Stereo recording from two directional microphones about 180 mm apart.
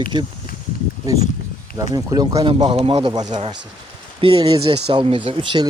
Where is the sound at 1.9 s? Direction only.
20° right (ahead or behind).